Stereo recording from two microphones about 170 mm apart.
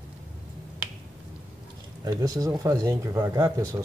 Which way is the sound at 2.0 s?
20° right (ahead or behind).